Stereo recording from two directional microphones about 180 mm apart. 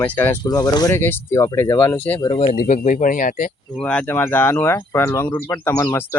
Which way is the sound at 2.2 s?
30° left (ahead or behind).